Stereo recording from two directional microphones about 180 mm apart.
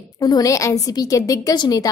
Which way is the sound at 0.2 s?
20° left (ahead or behind).